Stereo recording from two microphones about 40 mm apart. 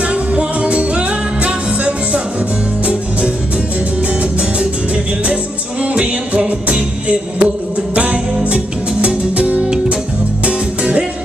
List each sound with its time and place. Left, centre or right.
0.1 s music: right
4.2 s music: right